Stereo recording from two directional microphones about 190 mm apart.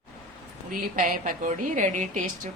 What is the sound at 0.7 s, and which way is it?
A woman's voice, 45° right (ahead or behind).